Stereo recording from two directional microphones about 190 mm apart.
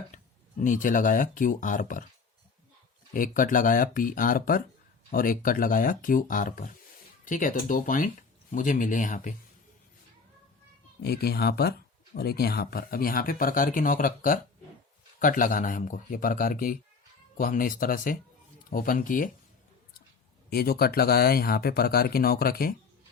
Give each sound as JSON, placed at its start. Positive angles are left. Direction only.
{"t": 0.1, "sound": "speech", "side_deg": 40}
{"t": 3.1, "sound": "speech", "side_deg": 45}
{"t": 11.0, "sound": "speech", "side_deg": 55}
{"t": 20.5, "sound": "speech", "side_deg": 55}